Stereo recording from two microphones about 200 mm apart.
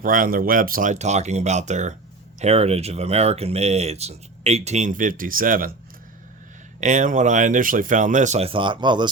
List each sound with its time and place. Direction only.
0.0 s speech: 45° right (ahead or behind)
6.7 s speech: 40° right (ahead or behind); by 9.0 s 20° right (ahead or behind)